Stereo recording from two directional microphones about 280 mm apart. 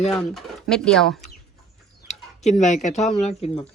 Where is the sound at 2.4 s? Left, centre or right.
Left.